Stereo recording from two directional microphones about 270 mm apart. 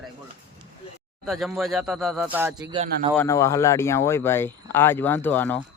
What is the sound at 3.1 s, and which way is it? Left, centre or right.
Speech, centre.